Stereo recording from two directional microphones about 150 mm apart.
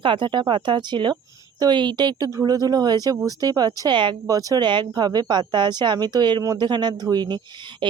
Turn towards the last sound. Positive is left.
turn(degrees=-30)  # may be behind; listen again after turning